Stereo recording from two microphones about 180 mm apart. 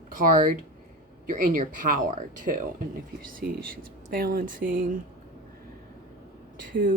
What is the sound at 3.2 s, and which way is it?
Speech, 50° right (ahead or behind).